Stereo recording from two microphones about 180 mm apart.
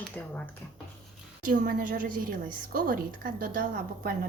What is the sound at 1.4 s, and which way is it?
A woman's voice, 50° right (ahead or behind).